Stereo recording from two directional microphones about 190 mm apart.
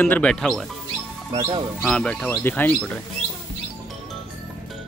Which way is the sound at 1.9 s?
5° left (ahead or behind).